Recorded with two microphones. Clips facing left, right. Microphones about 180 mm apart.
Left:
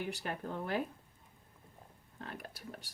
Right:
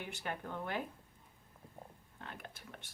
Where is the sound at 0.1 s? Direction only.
35° left (ahead or behind).